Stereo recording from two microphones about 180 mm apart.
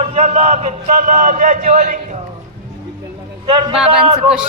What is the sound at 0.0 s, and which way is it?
A man's voice, 35° right (ahead or behind).